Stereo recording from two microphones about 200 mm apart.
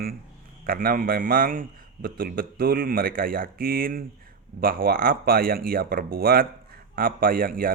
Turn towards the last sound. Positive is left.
turn(degrees=-45)  # may be behind; listen again after turning